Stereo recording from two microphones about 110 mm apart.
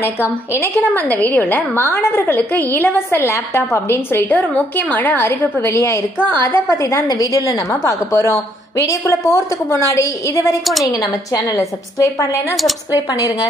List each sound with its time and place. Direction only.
0.6 s a woman's voice: 15° left (ahead or behind)
10.6 s a woman's voice: centre (ahead or behind)
10.9 s a woman's voice: 35° left (ahead or behind)